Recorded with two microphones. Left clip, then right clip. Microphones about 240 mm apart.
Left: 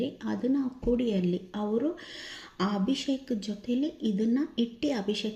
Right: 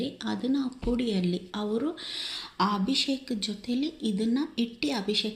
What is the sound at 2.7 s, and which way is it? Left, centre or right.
Speech, centre.